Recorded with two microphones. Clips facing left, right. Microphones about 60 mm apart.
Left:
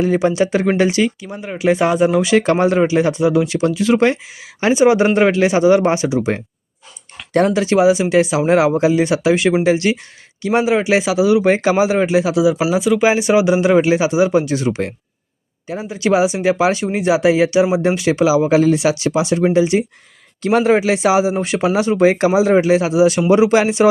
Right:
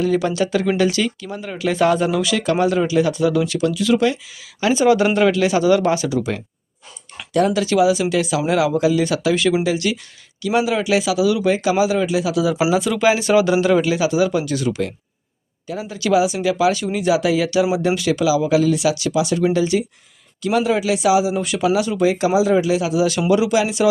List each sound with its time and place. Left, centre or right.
0.0 s speech: left
12.4 s speech: centre
20.4 s speech: left